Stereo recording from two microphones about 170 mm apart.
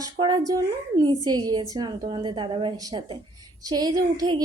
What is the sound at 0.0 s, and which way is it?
A woman's voice, 25° right (ahead or behind).